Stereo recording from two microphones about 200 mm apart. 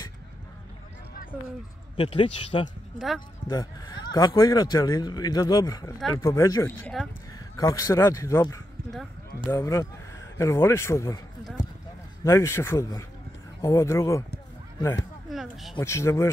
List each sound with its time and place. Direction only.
2.0 s speech: 30° left (ahead or behind)
7.0 s speech: centre (ahead or behind)
7.3 s speech: 15° left (ahead or behind)
12.3 s speech: 15° left (ahead or behind)
15.3 s speech: centre (ahead or behind)
15.8 s speech: 15° left (ahead or behind)